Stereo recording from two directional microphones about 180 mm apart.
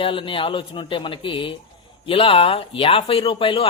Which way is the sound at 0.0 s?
30° left (ahead or behind).